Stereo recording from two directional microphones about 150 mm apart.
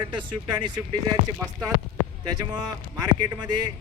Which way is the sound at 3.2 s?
30° right (ahead or behind).